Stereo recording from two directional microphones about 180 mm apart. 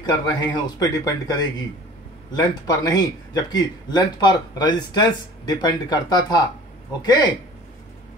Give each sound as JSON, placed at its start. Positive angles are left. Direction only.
{"t": 0.0, "sound": "a man's voice", "side_deg": 20}